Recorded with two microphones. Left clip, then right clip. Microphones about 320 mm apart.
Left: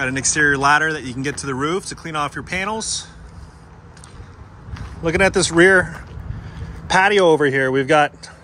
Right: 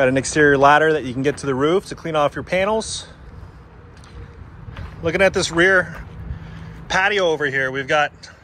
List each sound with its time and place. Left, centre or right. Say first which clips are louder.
0.3 s speech: right 1 dB; centre
5.0 s speech: even; centre